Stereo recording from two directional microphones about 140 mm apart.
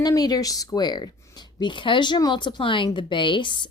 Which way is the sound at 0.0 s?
25° left (ahead or behind).